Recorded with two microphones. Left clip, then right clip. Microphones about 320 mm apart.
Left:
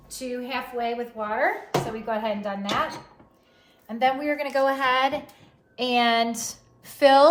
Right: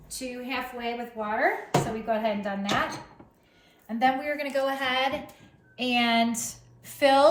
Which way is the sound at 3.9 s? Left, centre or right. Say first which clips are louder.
Left 2 dB; centre.